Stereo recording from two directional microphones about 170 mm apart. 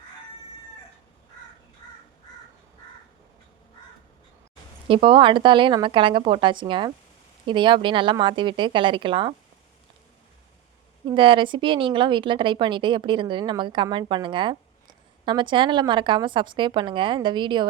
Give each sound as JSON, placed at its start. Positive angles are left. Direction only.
{"t": 4.9, "sound": "a woman's voice", "side_deg": -30}
{"t": 11.0, "sound": "a woman's voice", "side_deg": -30}